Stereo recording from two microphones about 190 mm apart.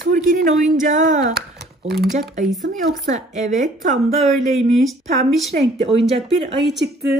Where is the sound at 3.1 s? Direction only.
40° right (ahead or behind).